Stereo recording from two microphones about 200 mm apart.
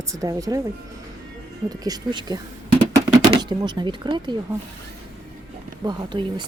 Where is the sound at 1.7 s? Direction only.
20° right (ahead or behind).